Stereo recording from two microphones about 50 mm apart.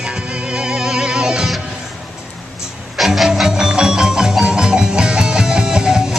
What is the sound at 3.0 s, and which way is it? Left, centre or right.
Music, centre.